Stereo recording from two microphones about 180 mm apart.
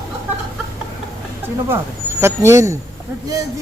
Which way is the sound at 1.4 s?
10° right (ahead or behind).